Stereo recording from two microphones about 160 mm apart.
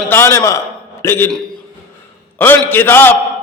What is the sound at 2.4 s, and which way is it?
Speech, 15° left (ahead or behind).